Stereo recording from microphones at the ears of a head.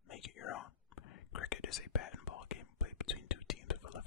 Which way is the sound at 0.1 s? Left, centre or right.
Left.